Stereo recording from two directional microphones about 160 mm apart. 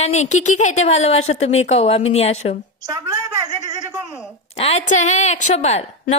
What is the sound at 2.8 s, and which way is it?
Speech, 20° right (ahead or behind).